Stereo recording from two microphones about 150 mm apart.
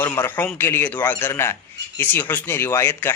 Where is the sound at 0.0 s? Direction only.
10° left (ahead or behind).